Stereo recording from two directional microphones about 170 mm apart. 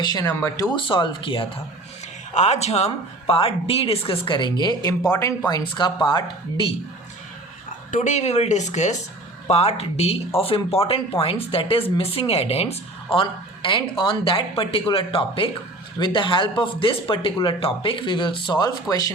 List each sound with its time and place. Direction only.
0.0 s speech: 25° left (ahead or behind)
2.3 s speech: 40° left (ahead or behind); by 5.1 s 25° left (ahead or behind)
5.1 s speech: 10° left (ahead or behind)
5.5 s speech: 25° left (ahead or behind)
7.9 s speech: 50° left (ahead or behind); by 19.1 s 20° left (ahead or behind)